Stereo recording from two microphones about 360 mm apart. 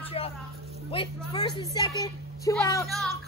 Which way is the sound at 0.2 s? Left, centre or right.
Centre.